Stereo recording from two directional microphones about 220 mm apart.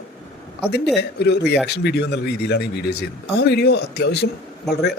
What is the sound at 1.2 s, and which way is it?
Speech, 50° left (ahead or behind).